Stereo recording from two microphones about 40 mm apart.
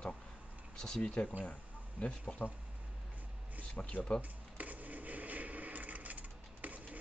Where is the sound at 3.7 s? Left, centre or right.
Left.